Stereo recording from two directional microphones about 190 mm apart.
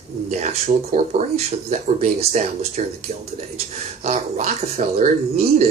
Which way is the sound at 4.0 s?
35° right (ahead or behind).